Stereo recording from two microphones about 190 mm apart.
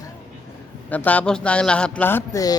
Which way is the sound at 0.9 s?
10° left (ahead or behind).